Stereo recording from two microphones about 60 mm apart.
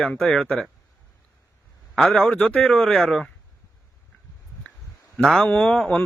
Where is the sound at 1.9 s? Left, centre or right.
Centre.